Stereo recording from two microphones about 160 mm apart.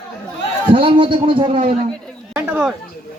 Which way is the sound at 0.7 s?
35° right (ahead or behind).